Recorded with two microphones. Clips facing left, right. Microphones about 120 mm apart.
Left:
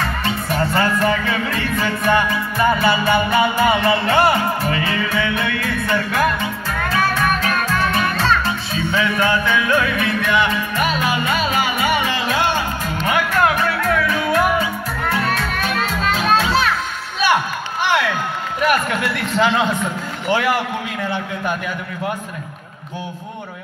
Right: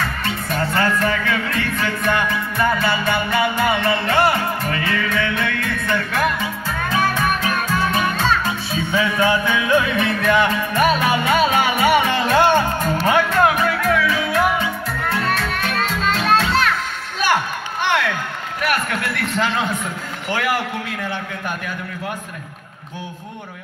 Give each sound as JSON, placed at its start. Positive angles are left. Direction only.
{"t": 0.2, "sound": "music", "side_deg": 15}
{"t": 6.9, "sound": "music", "side_deg": -15}
{"t": 10.2, "sound": "music", "side_deg": -40}
{"t": 13.0, "sound": "music", "side_deg": -30}
{"t": 13.4, "sound": "music", "side_deg": -10}
{"t": 16.0, "sound": "music", "side_deg": 5}
{"t": 18.7, "sound": "a sound", "side_deg": 15}